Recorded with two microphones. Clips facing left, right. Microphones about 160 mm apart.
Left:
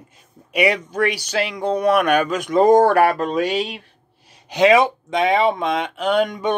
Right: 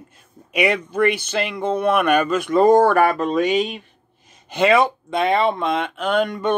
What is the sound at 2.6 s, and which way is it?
Speech, 15° left (ahead or behind).